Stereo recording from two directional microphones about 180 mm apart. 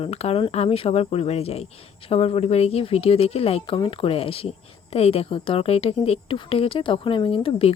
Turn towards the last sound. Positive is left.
turn(degrees=30)  # may be behind; listen again after turning